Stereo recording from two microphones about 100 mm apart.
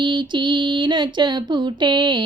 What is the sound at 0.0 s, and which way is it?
Female singing, 55° right (ahead or behind).